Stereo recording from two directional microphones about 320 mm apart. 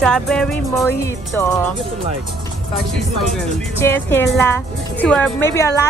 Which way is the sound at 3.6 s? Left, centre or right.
Centre.